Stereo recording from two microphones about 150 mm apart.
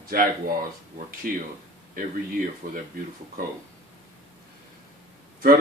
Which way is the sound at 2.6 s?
60° right (ahead or behind).